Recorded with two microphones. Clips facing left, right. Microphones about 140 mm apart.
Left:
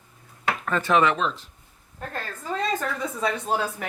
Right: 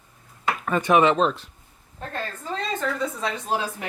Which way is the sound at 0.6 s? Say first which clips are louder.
Right 3 dB; 15° right (ahead or behind).